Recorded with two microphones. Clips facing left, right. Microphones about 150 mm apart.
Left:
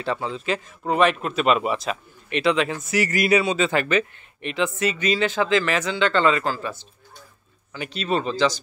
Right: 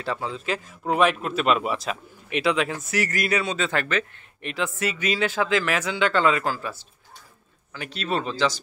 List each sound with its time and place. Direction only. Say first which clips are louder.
0.0 s a man's voice: left 2 dB; centre (ahead or behind)